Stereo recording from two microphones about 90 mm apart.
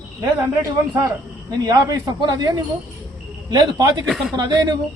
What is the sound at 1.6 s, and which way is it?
A man's voice, 45° right (ahead or behind).